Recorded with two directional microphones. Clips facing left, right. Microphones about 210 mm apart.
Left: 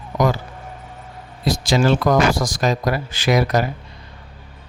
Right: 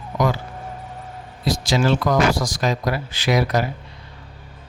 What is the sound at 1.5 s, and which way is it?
A man's voice, 50° left (ahead or behind).